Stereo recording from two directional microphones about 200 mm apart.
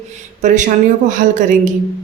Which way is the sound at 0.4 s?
40° right (ahead or behind).